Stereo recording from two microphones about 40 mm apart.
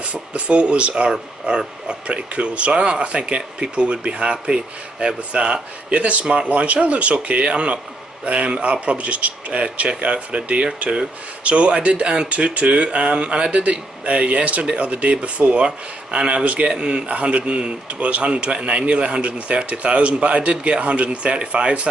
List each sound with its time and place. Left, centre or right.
0.0 s a man's voice: right
13.5 s a man's voice: right